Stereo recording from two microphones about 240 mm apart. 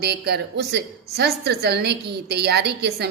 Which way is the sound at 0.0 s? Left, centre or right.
Right.